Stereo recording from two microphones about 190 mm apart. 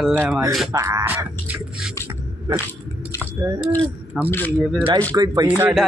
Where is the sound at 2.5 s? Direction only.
25° right (ahead or behind).